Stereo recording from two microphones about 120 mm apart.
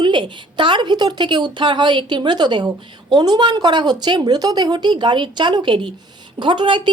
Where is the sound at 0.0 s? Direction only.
40° right (ahead or behind).